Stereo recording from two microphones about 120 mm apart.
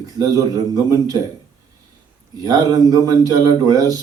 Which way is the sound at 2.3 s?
30° right (ahead or behind).